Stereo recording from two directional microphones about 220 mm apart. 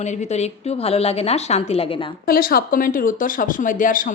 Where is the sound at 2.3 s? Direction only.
40° left (ahead or behind).